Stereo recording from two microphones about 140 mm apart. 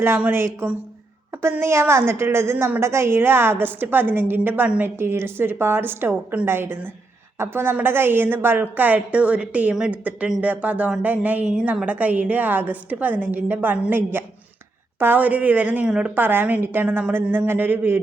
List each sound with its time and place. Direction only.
0.0 s a woman's voice: 15° right (ahead or behind)